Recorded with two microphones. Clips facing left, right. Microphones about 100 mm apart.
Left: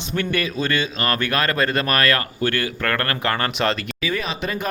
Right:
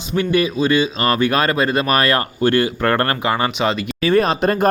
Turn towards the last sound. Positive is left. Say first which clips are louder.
# right 10 dB
turn(degrees=-45)  # may be behind; listen again after turning